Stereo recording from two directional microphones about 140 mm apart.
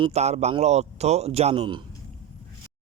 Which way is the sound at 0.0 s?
50° right (ahead or behind).